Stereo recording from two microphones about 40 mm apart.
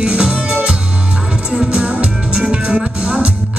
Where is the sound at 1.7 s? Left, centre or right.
Right.